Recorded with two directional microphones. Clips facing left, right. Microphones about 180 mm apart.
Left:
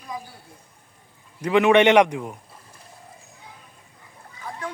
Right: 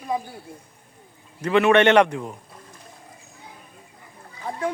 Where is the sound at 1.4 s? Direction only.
15° left (ahead or behind).